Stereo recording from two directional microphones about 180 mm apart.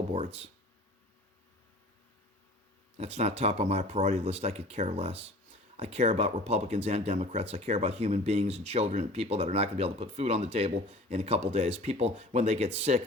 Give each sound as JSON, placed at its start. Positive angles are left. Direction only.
{"t": 3.0, "sound": "speech", "side_deg": -35}